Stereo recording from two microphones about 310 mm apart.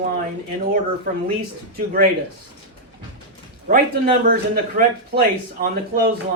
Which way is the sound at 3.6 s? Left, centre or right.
Right.